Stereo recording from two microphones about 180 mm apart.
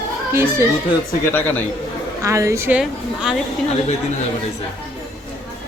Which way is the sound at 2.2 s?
15° right (ahead or behind).